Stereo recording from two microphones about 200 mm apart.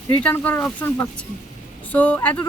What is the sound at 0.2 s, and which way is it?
Speech, 10° left (ahead or behind).